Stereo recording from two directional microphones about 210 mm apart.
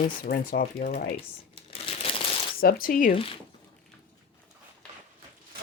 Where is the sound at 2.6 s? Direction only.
45° left (ahead or behind).